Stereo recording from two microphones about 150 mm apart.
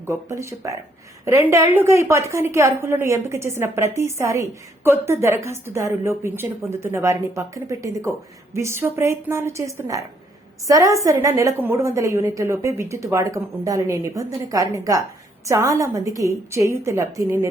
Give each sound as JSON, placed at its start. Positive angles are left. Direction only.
{"t": 0.0, "sound": "a woman's voice", "side_deg": -20}